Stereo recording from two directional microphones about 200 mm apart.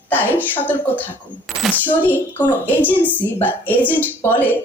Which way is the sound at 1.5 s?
Centre (ahead or behind).